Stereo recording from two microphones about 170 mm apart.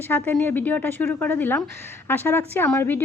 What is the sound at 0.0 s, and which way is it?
A woman's voice, 10° left (ahead or behind).